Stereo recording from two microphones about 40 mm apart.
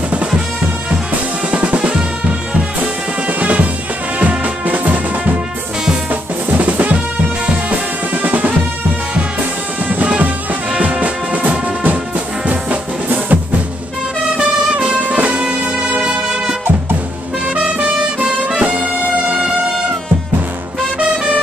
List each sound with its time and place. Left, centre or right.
1.5 s drum: right
3.3 s drum: right
4.2 s music: right
6.5 s drum kit: right
8.1 s music: right
9.8 s music: right
16.0 s music: centre
17.6 s music: right